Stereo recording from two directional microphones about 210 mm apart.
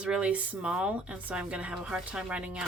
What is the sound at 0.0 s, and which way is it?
Speech, 5° right (ahead or behind).